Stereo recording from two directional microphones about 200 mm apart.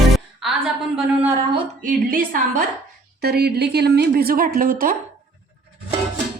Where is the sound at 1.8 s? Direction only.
45° right (ahead or behind).